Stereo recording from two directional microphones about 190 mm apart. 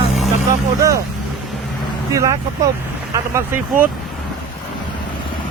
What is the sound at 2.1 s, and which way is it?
Speech, 15° right (ahead or behind).